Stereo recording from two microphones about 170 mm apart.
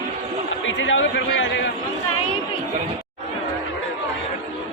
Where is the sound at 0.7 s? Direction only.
90° left.